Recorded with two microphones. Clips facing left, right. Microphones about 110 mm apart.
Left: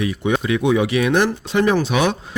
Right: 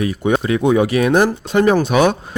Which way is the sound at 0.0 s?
40° right (ahead or behind).